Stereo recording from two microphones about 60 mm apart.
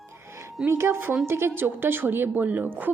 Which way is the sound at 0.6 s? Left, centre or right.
Right.